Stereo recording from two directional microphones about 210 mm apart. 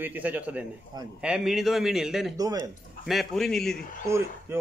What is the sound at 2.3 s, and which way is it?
Speech, 15° right (ahead or behind).